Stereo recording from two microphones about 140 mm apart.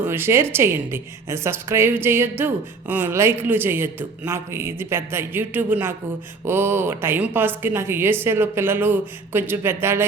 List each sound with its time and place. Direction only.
0.0 s speech: 15° right (ahead or behind)